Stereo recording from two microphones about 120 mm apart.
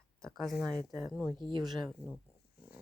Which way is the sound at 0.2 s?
Centre (ahead or behind).